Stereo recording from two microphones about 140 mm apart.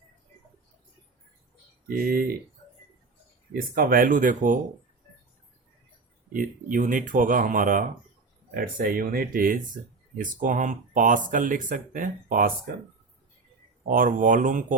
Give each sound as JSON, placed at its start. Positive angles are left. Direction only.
{"t": 1.9, "sound": "speech", "side_deg": -90}
{"t": 3.5, "sound": "speech", "side_deg": -90}
{"t": 6.3, "sound": "speech", "side_deg": -75}
{"t": 10.2, "sound": "speech", "side_deg": -70}
{"t": 13.8, "sound": "speech", "side_deg": -80}